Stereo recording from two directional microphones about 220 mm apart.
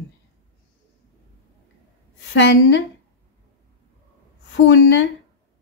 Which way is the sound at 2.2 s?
55° left (ahead or behind).